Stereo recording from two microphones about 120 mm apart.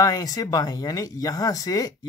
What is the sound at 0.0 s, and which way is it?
Speech, 30° left (ahead or behind).